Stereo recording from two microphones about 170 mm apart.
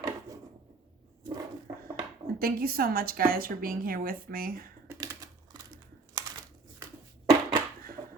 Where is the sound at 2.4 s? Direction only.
60° right (ahead or behind).